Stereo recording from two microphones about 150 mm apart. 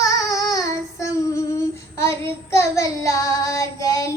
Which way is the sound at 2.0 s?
20° left (ahead or behind).